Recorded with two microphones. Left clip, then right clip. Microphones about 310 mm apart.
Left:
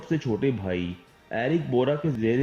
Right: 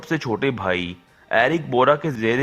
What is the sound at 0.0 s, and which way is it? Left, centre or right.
Speech, right.